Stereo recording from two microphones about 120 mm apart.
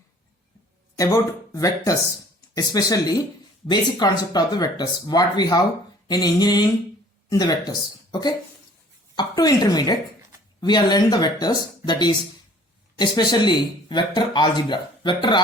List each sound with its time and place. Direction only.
0.9 s speech: 30° left (ahead or behind)